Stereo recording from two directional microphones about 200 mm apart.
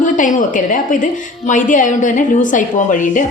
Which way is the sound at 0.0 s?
40° left (ahead or behind).